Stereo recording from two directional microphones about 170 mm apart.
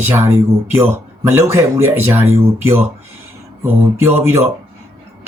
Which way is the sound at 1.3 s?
15° right (ahead or behind).